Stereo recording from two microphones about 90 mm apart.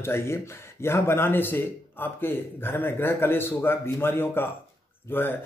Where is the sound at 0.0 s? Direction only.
30° left (ahead or behind).